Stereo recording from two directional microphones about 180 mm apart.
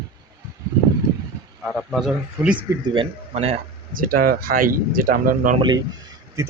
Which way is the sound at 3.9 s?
55° right (ahead or behind).